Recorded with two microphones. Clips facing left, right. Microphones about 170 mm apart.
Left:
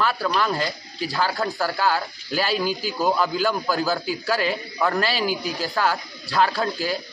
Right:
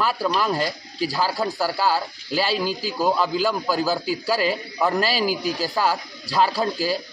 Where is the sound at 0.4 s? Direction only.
10° right (ahead or behind).